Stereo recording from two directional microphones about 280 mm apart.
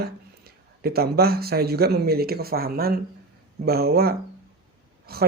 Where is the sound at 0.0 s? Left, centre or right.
Right.